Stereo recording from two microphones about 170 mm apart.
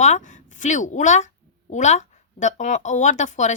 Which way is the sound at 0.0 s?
45° left (ahead or behind).